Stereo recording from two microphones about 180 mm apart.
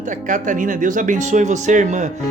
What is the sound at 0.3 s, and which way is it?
Speech, 45° right (ahead or behind).